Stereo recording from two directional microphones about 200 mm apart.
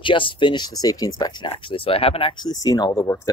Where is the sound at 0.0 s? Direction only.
25° left (ahead or behind).